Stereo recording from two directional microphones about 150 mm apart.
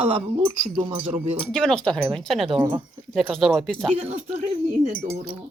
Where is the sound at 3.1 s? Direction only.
Centre (ahead or behind).